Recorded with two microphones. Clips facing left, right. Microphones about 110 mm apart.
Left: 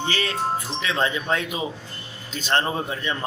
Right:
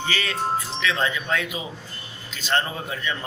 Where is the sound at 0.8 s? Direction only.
30° left (ahead or behind).